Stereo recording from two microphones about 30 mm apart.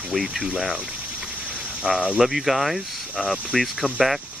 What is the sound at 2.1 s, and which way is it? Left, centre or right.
Cricket, centre.